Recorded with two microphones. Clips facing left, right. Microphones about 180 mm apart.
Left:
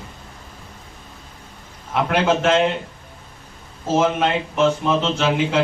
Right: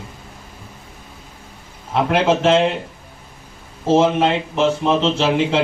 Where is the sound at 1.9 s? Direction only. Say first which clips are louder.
Right 2 dB; 30° right (ahead or behind).